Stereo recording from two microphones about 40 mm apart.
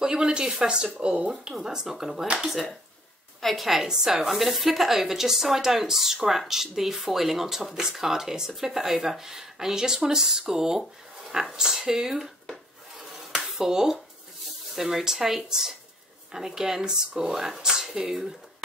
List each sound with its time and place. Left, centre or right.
0.0 s speech: centre
1.4 s speech: centre
3.3 s a woman's voice: centre
3.6 s speech: centre
4.3 s speech: centre
13.5 s speech: centre